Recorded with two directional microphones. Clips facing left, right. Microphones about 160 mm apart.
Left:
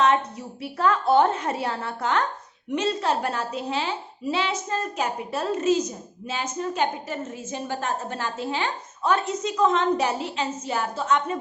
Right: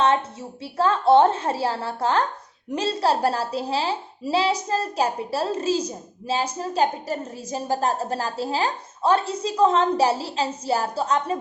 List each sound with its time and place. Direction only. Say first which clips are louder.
0.0 s a woman's voice: even; 30° right (ahead or behind)